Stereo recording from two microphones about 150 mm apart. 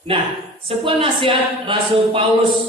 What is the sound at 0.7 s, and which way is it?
Speech, 35° right (ahead or behind).